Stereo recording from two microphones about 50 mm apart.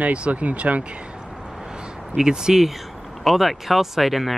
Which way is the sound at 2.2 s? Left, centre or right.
Centre.